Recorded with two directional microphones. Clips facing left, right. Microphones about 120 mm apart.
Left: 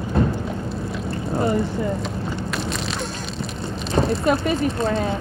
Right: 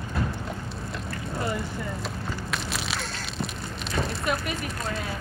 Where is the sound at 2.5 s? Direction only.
Centre (ahead or behind).